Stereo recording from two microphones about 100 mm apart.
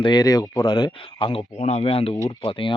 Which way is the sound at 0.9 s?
65° left (ahead or behind).